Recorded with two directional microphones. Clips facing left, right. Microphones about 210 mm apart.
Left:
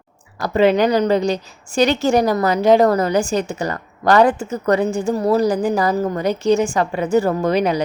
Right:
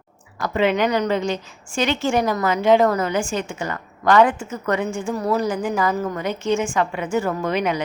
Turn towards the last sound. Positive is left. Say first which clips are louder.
# left 5 dB
turn(degrees=35)  # may be behind; listen again after turning